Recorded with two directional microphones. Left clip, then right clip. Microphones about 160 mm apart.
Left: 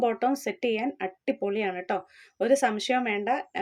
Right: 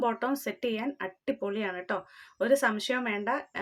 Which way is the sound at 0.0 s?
20° left (ahead or behind).